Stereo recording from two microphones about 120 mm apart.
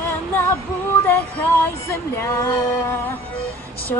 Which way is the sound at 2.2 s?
25° left (ahead or behind).